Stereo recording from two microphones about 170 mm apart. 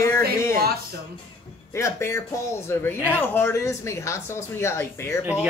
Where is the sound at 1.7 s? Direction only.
15° left (ahead or behind).